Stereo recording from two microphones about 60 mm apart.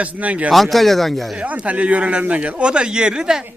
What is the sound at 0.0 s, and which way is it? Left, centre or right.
Speech, right.